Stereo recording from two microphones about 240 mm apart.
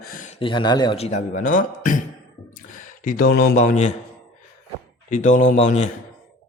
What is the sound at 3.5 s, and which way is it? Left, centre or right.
Speech, left.